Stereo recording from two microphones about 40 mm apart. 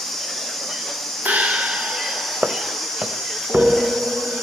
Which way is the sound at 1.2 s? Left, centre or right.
Right.